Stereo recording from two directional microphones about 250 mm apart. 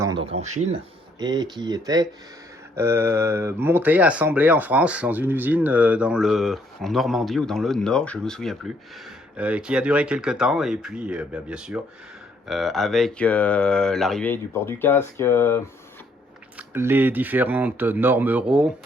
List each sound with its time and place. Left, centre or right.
0.0 s speech: centre
1.2 s speech: centre
16.6 s speech: centre